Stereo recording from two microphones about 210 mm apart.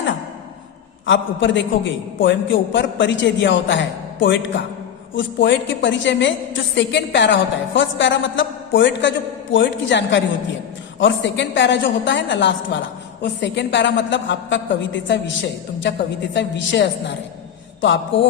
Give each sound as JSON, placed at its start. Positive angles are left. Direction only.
{"t": 1.0, "sound": "a woman's voice", "side_deg": 60}
{"t": 16.3, "sound": "a woman's voice", "side_deg": 55}